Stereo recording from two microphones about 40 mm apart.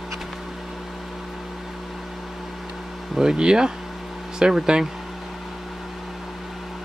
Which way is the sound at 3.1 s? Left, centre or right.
Centre.